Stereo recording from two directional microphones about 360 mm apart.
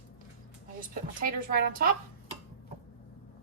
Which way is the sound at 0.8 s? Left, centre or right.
Right.